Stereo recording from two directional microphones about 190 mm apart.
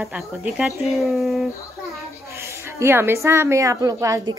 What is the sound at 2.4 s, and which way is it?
A woman's voice, 15° right (ahead or behind).